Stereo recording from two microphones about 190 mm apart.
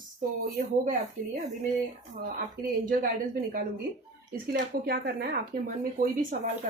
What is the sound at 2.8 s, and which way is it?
Speech, 50° right (ahead or behind).